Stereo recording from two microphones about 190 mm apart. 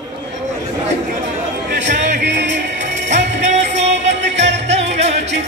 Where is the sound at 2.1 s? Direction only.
65° right (ahead or behind).